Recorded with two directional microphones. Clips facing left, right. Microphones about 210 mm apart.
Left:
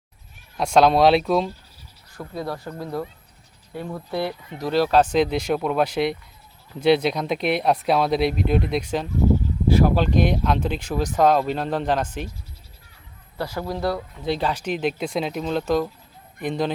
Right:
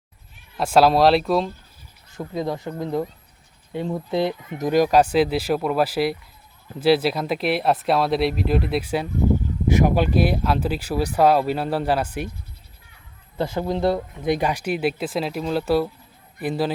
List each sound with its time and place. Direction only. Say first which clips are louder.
0.5 s speech: even; 5° right (ahead or behind)
2.1 s speech: right 4 dB; 20° right (ahead or behind)
13.3 s speech: right 4 dB; 25° right (ahead or behind); by 16.7 s 5° right (ahead or behind)